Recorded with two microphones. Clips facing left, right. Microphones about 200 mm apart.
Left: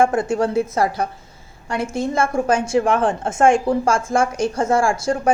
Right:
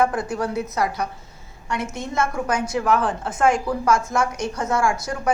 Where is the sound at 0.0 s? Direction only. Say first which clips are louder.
Left 5 dB; 25° left (ahead or behind).